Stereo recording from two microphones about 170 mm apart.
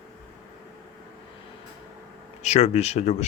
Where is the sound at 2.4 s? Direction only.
40° left (ahead or behind).